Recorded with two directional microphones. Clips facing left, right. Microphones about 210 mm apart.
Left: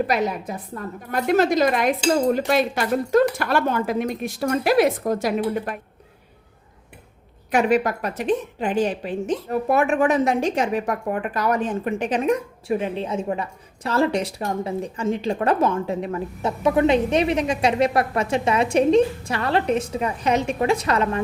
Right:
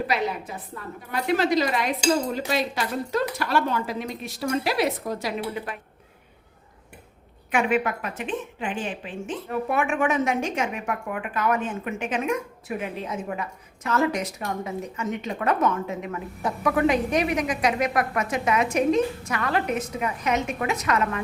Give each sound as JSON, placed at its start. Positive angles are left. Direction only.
{"t": 0.1, "sound": "speech", "side_deg": 45}
{"t": 7.5, "sound": "a woman's voice", "side_deg": 40}